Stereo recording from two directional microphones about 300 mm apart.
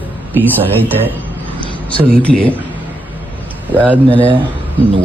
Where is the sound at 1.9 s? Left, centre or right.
Centre.